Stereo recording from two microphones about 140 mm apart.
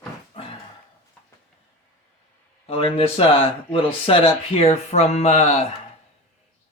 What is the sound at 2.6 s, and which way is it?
Speech, 40° left (ahead or behind).